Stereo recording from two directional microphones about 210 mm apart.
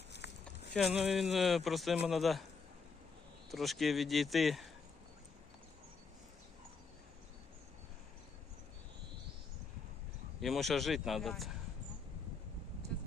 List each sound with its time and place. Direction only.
0.2 s a sound: 55° left (ahead or behind)
0.7 s speech: centre (ahead or behind)
3.5 s speech: centre (ahead or behind)
10.4 s speech: centre (ahead or behind)